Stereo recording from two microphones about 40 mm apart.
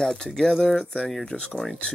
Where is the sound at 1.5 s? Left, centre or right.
Centre.